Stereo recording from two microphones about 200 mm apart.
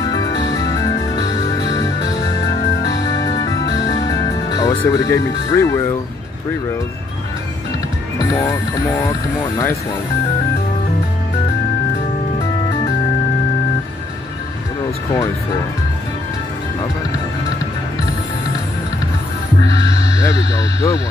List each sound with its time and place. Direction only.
0.1 s music: 20° left (ahead or behind)
2.9 s music: 20° left (ahead or behind)
8.4 s speech: 15° left (ahead or behind)
20.2 s a sound: 15° left (ahead or behind)